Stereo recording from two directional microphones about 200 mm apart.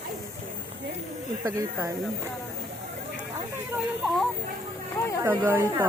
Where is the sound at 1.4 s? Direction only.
15° right (ahead or behind).